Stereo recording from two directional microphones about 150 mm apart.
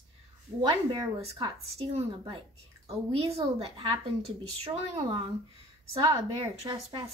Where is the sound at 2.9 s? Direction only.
40° right (ahead or behind).